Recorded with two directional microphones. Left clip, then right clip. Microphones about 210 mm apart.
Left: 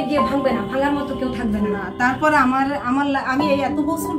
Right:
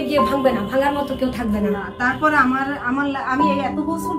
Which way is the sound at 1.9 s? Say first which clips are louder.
Left 1 dB; 35° left (ahead or behind).